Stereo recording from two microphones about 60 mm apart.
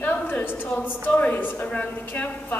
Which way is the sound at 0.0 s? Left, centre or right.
Left.